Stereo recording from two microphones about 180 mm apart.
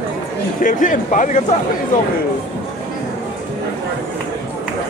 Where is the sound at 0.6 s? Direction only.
45° left (ahead or behind).